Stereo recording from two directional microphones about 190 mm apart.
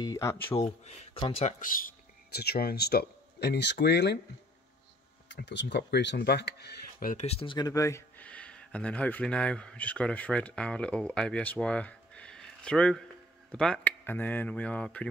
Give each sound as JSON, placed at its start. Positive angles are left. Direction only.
{"t": 0.0, "sound": "speech", "side_deg": 20}
{"t": 0.5, "sound": "speech", "side_deg": 35}
{"t": 1.4, "sound": "speech", "side_deg": 45}
{"t": 5.3, "sound": "speech", "side_deg": 65}
{"t": 7.2, "sound": "speech", "side_deg": 30}